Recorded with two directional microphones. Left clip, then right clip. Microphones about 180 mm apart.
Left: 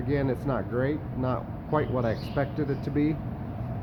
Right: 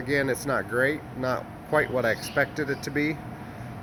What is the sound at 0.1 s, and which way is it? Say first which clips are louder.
Speech: right 3 dB; 15° right (ahead or behind).